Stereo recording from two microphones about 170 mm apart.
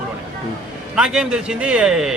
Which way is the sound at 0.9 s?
5° right (ahead or behind).